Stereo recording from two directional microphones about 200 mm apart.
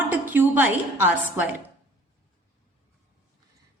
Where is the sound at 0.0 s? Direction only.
10° right (ahead or behind).